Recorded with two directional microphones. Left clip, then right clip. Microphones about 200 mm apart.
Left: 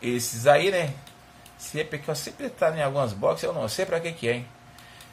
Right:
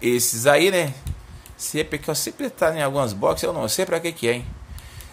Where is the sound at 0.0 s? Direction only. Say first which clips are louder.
Right 4 dB; 25° right (ahead or behind).